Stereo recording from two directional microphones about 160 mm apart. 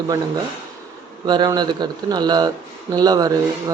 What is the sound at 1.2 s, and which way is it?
A man's voice, 25° right (ahead or behind).